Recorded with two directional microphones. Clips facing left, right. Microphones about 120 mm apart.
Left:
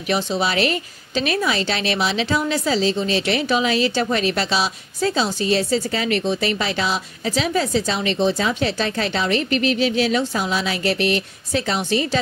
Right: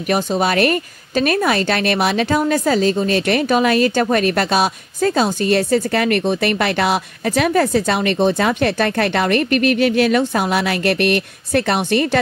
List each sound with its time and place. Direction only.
0.1 s a woman's voice: 50° right (ahead or behind)